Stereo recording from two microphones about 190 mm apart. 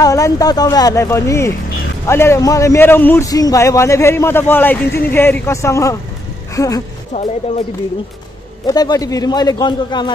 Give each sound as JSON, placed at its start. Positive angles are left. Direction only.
{"t": 0.0, "sound": "a man's voice", "side_deg": 20}
{"t": 8.6, "sound": "a man's voice", "side_deg": 20}